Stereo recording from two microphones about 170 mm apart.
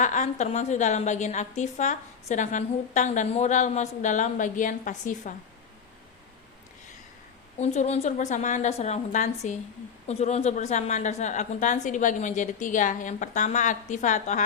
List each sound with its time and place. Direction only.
0.0 s a woman's voice: 45° left (ahead or behind)
7.6 s a woman's voice: 40° left (ahead or behind)